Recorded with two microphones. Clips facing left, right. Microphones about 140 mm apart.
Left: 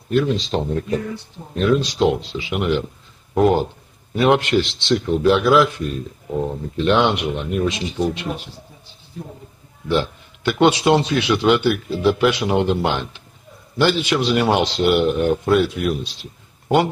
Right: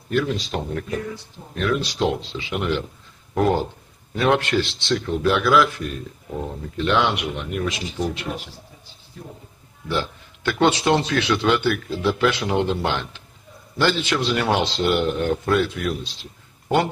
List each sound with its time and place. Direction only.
0.1 s speech: 25° left (ahead or behind)
6.8 s speech: 25° left (ahead or behind)
9.8 s a man's voice: 20° left (ahead or behind)